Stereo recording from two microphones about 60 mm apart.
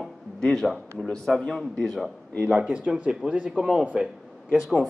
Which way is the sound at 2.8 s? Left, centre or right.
Right.